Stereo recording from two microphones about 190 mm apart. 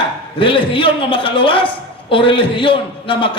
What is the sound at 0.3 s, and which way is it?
A man's voice, 25° left (ahead or behind).